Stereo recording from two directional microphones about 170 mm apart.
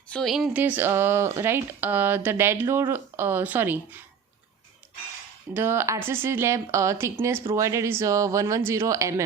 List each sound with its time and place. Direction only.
0.1 s speech: centre (ahead or behind)
5.5 s speech: 15° right (ahead or behind)